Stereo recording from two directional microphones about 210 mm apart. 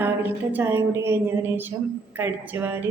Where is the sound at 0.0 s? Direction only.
10° right (ahead or behind).